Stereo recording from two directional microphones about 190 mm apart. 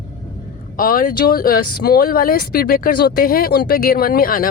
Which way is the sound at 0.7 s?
50° left (ahead or behind).